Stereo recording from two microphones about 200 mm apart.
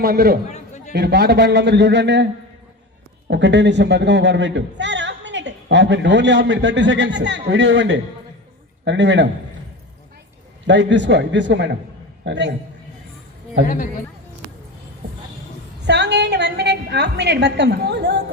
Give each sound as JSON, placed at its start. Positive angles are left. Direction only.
{"t": 0.0, "sound": "a man's voice", "side_deg": -50}
{"t": 0.5, "sound": "chatter", "side_deg": 35}
{"t": 0.9, "sound": "a man's voice", "side_deg": -55}
{"t": 3.2, "sound": "a man's voice", "side_deg": -60}
{"t": 10.7, "sound": "a man's voice", "side_deg": -60}
{"t": 13.6, "sound": "a woman's voice", "side_deg": -65}
{"t": 15.9, "sound": "a man's voice", "side_deg": -60}